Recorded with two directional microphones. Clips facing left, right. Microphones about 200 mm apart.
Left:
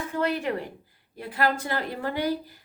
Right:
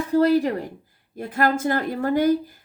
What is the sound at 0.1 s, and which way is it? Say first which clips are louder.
Speech: right 10 dB; 35° right (ahead or behind).